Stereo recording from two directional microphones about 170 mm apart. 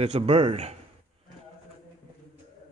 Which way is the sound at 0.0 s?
35° right (ahead or behind).